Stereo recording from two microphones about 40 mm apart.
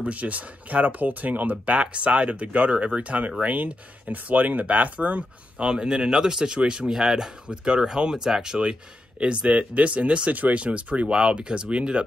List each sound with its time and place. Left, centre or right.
0.0 s speech: right
1.8 s speech: right
5.6 s speech: centre
6.9 s speech: centre
9.5 s speech: right
10.3 s speech: right
10.6 s speech: right
11.1 s speech: right